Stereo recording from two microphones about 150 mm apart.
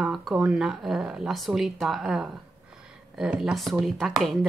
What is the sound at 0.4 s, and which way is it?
A woman's voice, 5° right (ahead or behind).